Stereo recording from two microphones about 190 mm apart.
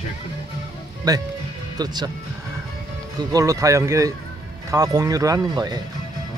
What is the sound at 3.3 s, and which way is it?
Speech, 20° right (ahead or behind).